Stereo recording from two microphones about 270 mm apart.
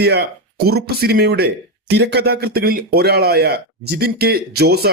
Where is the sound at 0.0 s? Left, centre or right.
Right.